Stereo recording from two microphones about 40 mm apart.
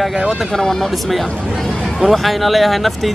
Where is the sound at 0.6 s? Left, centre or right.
Centre.